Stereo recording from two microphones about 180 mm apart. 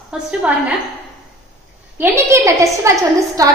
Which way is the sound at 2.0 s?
15° right (ahead or behind).